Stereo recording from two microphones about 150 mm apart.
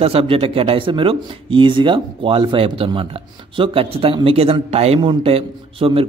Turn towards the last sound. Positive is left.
turn(degrees=-40)  # may be behind; listen again after turning